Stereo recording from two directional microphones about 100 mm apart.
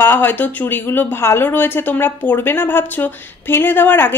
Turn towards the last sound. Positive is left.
turn(degrees=20)  # may be behind; listen again after turning